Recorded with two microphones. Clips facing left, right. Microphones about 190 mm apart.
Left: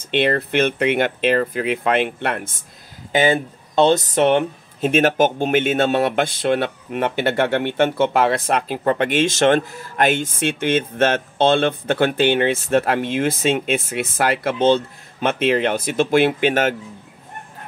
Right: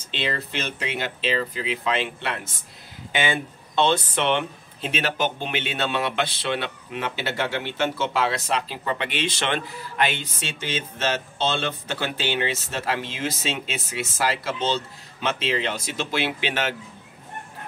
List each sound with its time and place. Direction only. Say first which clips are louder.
0.1 s speech: left 10 dB; 60° left (ahead or behind)
3.1 s speech: left 8 dB; 40° left (ahead or behind)